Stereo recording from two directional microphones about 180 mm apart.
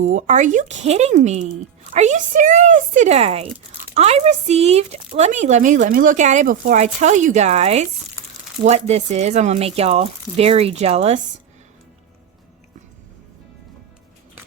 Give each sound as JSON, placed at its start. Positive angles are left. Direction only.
{"t": 0.0, "sound": "speech", "side_deg": -45}